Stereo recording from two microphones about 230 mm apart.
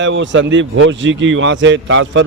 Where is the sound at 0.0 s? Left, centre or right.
Right.